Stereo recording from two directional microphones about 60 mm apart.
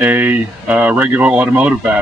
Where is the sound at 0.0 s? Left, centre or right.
Right.